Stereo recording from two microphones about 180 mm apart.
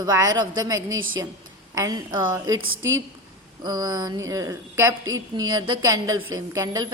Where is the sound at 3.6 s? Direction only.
20° right (ahead or behind).